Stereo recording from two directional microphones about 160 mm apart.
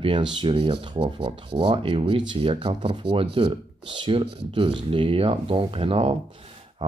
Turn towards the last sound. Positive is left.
turn(degrees=-35)  # may be behind; listen again after turning